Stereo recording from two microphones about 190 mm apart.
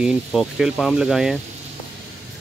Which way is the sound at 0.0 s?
Centre (ahead or behind).